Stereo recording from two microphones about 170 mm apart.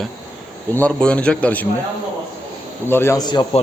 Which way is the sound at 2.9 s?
15° left (ahead or behind).